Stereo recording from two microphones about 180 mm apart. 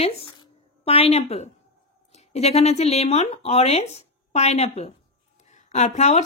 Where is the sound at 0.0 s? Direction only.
35° left (ahead or behind).